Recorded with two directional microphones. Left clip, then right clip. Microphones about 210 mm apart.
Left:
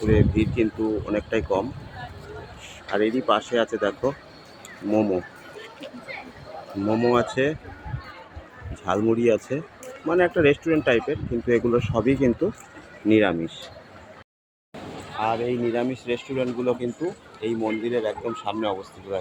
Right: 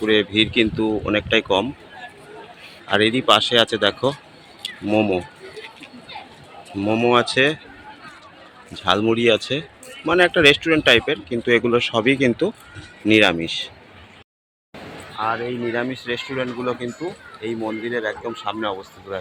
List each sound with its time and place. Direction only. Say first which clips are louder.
0.1 s speech: right 5 dB; 20° right (ahead or behind)
2.9 s speech: right 6 dB; 20° right (ahead or behind)
6.8 s speech: right 4 dB; 20° right (ahead or behind)
8.8 s speech: right 4 dB; 15° right (ahead or behind)
15.2 s speech: right 1 dB; centre (ahead or behind)